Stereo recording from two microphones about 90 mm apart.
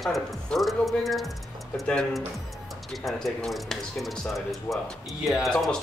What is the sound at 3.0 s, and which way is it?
Speech, 5° left (ahead or behind).